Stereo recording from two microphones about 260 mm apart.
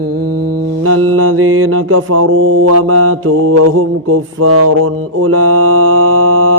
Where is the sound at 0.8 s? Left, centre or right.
Right.